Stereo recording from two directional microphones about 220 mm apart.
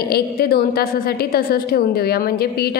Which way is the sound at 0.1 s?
45° left (ahead or behind).